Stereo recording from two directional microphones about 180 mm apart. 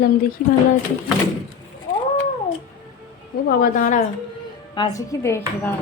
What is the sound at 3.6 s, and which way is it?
Speech, 50° left (ahead or behind).